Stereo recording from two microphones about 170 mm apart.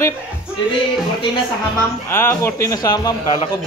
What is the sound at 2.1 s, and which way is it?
Speech, 15° left (ahead or behind).